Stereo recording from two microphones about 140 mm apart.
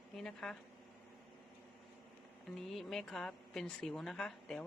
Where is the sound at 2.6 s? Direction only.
Centre (ahead or behind).